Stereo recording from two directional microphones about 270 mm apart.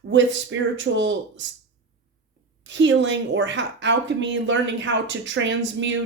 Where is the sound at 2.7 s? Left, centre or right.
Right.